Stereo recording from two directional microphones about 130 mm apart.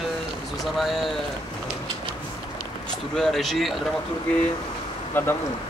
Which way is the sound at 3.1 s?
Centre (ahead or behind).